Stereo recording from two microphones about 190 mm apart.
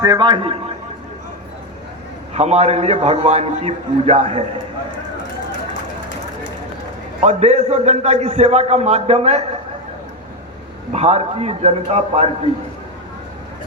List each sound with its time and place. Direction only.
0.0 s a man's voice: 20° right (ahead or behind)
2.3 s a man's voice: 35° right (ahead or behind)
7.2 s a man's voice: 35° right (ahead or behind)
10.9 s a man's voice: 35° right (ahead or behind)